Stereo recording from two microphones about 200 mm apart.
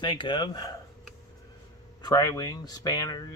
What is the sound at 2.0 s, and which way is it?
Speech, 20° left (ahead or behind).